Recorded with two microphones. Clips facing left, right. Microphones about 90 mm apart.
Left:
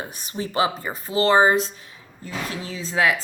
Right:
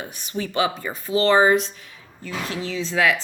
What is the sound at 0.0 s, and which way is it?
A woman's voice, 35° left (ahead or behind).